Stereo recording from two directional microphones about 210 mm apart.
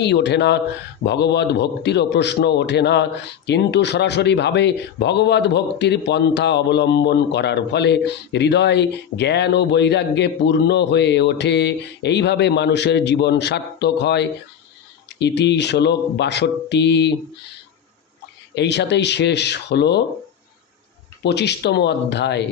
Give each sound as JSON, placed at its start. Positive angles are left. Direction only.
{"t": 0.0, "sound": "a man's voice", "side_deg": 55}
{"t": 18.5, "sound": "a man's voice", "side_deg": 55}
{"t": 21.2, "sound": "speech", "side_deg": 55}